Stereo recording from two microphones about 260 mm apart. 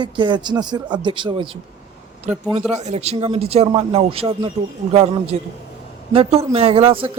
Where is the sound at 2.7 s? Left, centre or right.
Right.